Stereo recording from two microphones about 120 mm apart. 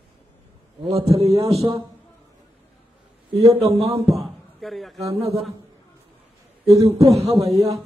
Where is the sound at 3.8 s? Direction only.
55° right (ahead or behind).